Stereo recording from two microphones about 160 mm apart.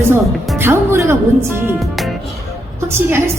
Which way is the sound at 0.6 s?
15° right (ahead or behind).